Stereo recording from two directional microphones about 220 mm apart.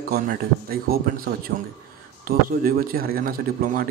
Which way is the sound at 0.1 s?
40° right (ahead or behind).